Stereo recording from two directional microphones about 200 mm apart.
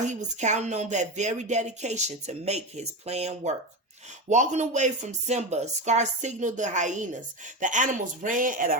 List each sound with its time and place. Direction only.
0.0 s speech: 35° right (ahead or behind)